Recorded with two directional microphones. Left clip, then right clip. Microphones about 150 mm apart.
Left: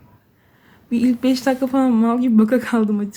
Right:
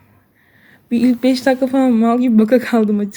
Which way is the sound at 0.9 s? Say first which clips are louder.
Right 4 dB; 20° right (ahead or behind).